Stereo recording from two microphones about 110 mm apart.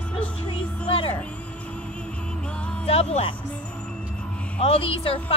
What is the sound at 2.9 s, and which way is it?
Speech, 70° left (ahead or behind).